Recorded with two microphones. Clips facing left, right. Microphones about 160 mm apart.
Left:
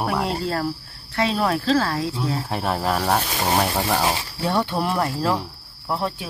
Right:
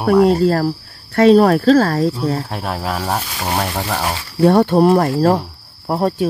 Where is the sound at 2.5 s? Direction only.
Centre (ahead or behind).